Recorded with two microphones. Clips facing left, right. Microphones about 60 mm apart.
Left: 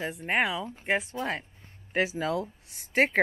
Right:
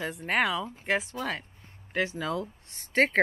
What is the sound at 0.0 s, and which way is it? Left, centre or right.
Speech, centre.